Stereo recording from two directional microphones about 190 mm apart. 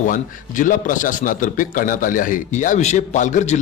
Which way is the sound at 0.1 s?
45° left (ahead or behind).